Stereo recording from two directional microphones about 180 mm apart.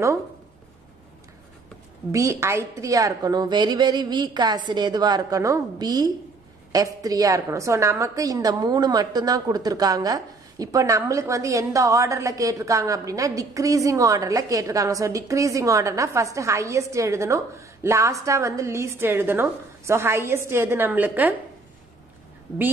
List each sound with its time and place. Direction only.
2.1 s a woman's voice: 15° right (ahead or behind)